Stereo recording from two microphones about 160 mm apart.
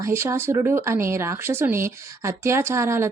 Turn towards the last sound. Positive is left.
turn(degrees=-15)  # may be behind; listen again after turning